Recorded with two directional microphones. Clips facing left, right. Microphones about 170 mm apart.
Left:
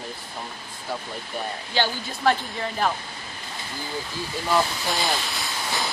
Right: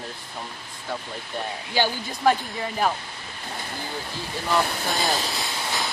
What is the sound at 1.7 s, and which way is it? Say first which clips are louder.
Speech: right 1 dB; 10° right (ahead or behind).